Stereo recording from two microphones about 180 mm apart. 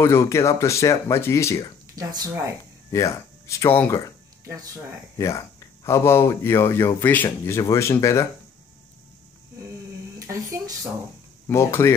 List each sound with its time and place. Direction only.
0.0 s speech: 15° left (ahead or behind)
2.0 s speech: 20° right (ahead or behind)
2.9 s speech: 15° left (ahead or behind)
5.1 s speech: 20° left (ahead or behind)
10.1 s speech: 15° right (ahead or behind)
11.4 s speech: 15° left (ahead or behind)